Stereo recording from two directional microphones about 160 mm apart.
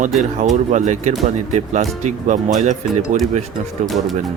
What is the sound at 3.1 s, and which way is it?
Speech, 50° right (ahead or behind).